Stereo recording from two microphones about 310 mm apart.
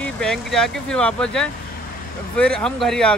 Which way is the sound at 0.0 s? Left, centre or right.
Centre.